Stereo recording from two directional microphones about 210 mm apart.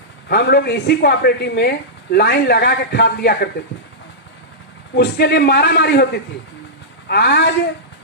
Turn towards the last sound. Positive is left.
turn(degrees=50)  # may be behind; listen again after turning